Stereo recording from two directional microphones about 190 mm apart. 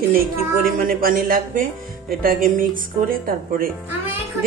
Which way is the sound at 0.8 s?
50° right (ahead or behind).